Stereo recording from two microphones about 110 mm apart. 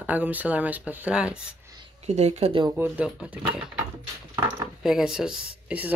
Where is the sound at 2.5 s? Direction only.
45° right (ahead or behind).